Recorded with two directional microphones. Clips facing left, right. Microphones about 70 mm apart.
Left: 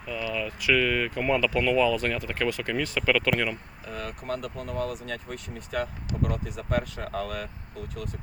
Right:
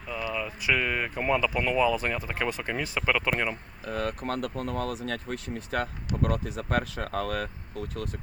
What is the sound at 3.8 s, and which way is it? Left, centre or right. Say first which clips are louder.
Speech: right 7 dB; right.